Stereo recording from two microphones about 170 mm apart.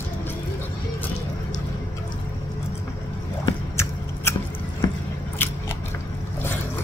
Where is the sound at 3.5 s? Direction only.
15° left (ahead or behind).